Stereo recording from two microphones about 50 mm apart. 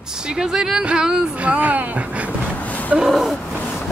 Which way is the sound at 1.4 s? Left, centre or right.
Right.